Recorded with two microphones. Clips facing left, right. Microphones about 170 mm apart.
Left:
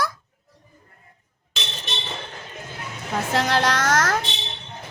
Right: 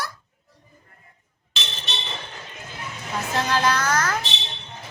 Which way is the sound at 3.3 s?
75° left (ahead or behind).